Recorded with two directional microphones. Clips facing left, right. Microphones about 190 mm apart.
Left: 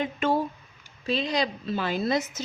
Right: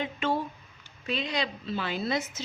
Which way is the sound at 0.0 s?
45° left (ahead or behind).